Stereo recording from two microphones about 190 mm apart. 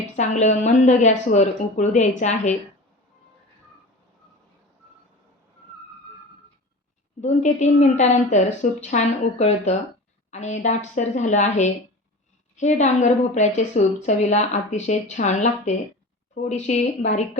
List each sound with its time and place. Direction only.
0.2 s a woman's voice: 35° left (ahead or behind)
7.2 s a woman's voice: 40° left (ahead or behind)